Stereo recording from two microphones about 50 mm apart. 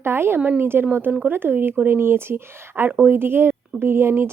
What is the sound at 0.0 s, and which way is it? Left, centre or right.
Speech, right.